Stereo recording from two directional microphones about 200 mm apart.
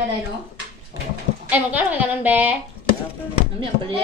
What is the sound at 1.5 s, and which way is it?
A woman's voice, 10° right (ahead or behind).